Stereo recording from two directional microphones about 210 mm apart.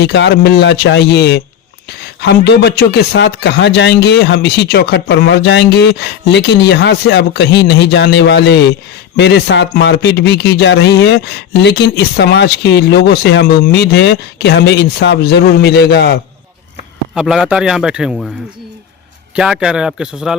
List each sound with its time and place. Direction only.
0.0 s a man's voice: 55° left (ahead or behind)
17.2 s a man's voice: centre (ahead or behind)
19.4 s a man's voice: 5° right (ahead or behind)